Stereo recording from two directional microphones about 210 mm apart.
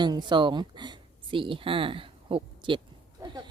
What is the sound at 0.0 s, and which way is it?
Speech, 20° right (ahead or behind).